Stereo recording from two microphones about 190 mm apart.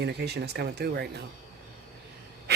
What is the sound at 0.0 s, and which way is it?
Speech, 60° right (ahead or behind).